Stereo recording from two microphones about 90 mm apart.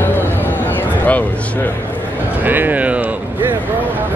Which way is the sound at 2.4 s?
20° right (ahead or behind).